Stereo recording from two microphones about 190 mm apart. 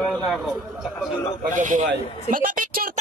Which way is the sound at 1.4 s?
40° right (ahead or behind).